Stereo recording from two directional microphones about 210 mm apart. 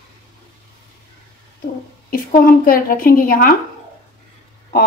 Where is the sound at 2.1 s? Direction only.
40° left (ahead or behind).